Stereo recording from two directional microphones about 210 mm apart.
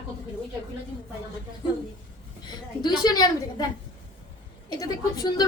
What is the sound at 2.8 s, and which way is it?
Speech, 20° left (ahead or behind).